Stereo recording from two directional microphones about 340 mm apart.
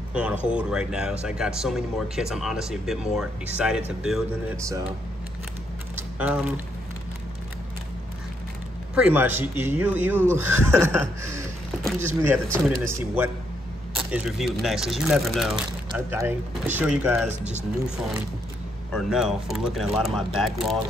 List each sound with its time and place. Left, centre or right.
0.1 s speech: centre
5.9 s a sound: centre
8.9 s speech: centre
17.3 s speech: centre
18.9 s speech: centre